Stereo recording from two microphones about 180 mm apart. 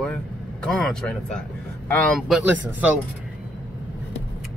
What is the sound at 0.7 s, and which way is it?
Speech, 5° left (ahead or behind).